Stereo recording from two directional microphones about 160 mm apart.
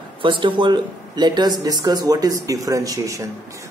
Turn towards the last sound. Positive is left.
turn(degrees=-20)  # may be behind; listen again after turning